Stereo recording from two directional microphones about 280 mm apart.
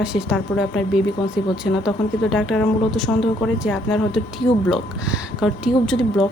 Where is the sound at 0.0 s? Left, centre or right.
Centre.